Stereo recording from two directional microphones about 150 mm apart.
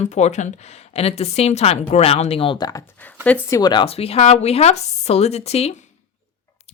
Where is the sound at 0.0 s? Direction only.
50° left (ahead or behind); by 2.6 s 35° left (ahead or behind).